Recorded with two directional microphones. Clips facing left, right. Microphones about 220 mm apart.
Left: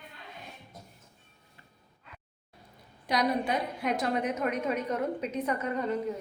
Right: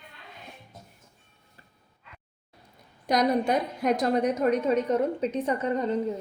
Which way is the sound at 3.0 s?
45° right (ahead or behind).